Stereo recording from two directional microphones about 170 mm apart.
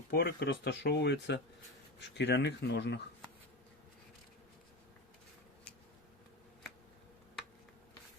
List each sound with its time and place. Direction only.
0.1 s speech: 75° left (ahead or behind)